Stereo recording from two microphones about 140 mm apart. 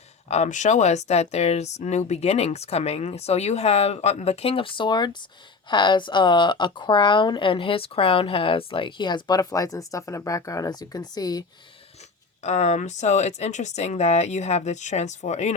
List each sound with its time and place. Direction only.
0.3 s speech: 55° left (ahead or behind); by 11.4 s 30° left (ahead or behind)
12.4 s speech: 55° left (ahead or behind)